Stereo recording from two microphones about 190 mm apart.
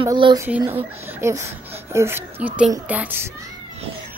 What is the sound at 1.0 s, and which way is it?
A woman's voice, 10° right (ahead or behind).